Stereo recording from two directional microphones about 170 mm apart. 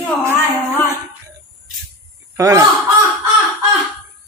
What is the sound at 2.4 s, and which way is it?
Speech, 20° right (ahead or behind).